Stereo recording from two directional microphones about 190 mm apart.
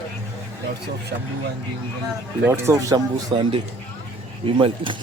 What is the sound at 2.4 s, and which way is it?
Speech, 10° right (ahead or behind).